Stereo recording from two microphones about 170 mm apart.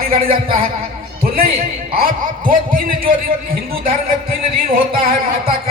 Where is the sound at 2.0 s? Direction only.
55° right (ahead or behind).